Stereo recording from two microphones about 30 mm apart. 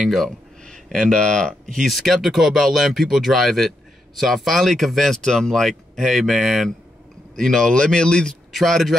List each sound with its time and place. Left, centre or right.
0.8 s speech: centre
1.1 s speech: left
1.8 s speech: centre
2.1 s speech: centre
7.3 s speech: centre
8.6 s speech: centre